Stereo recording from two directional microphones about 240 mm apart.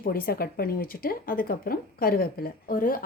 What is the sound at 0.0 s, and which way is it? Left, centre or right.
A woman's voice, left.